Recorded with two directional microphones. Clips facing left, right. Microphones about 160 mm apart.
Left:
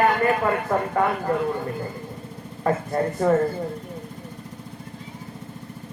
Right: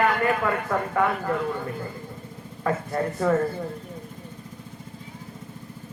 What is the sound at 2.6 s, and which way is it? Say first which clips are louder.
Speech: left 3 dB; 35° left (ahead or behind).